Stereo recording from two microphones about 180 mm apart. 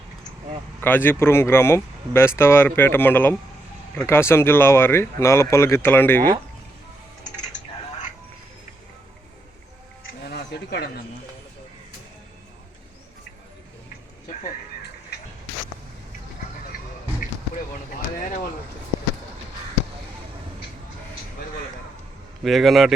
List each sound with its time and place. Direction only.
0.8 s speech: 10° left (ahead or behind)
10.0 s a sound: 80° left
22.4 s a man's voice: centre (ahead or behind)